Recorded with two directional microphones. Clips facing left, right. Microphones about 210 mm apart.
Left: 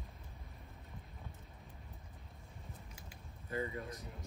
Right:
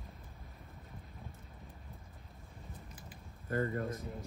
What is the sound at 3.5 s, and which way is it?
Speech, 50° right (ahead or behind).